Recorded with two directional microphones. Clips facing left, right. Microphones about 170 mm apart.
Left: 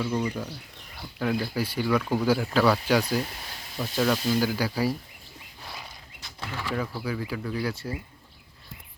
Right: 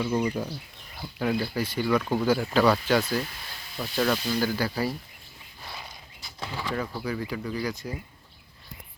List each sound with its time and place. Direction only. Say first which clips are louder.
0.0 s speech: right 2 dB; 15° right (ahead or behind)
1.5 s speech: even; 10° left (ahead or behind)
6.4 s speech: right 1 dB; 15° right (ahead or behind)
6.7 s speech: left 1 dB; 5° left (ahead or behind)